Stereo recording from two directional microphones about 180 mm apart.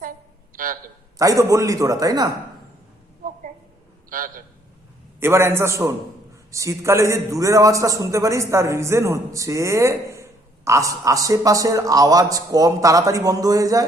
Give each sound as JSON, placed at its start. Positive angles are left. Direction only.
{"t": 0.5, "sound": "a sound", "side_deg": -50}
{"t": 1.2, "sound": "a man's voice", "side_deg": -20}
{"t": 4.1, "sound": "a man's voice", "side_deg": -50}
{"t": 5.2, "sound": "a man's voice", "side_deg": -15}